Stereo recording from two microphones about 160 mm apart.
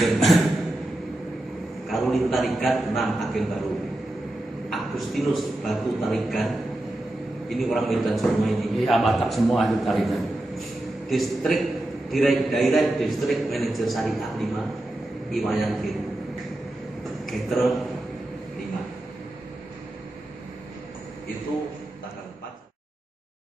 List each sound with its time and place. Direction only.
0.3 s a sound: centre (ahead or behind)
1.9 s a man's voice: centre (ahead or behind)
4.6 s a man's voice: centre (ahead or behind)
17.3 s a man's voice: centre (ahead or behind)